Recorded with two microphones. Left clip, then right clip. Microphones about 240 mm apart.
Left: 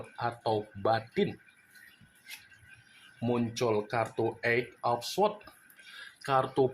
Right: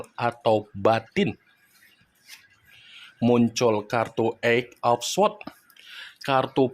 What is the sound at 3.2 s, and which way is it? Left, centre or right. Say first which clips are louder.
Speech: right 10 dB; right.